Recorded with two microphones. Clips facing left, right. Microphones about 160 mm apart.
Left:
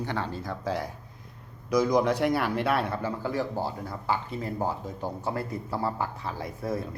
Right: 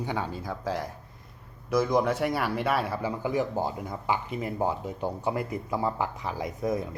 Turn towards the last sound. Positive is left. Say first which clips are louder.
# right 2 dB
turn(degrees=-15)  # may be behind; listen again after turning